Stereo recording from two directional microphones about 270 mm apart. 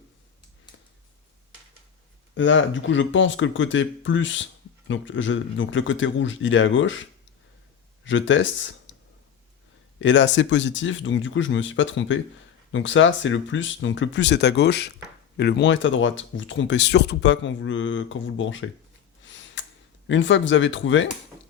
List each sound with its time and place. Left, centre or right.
2.3 s speech: left
8.0 s speech: left
10.0 s speech: left
19.2 s a sound: left
20.1 s speech: left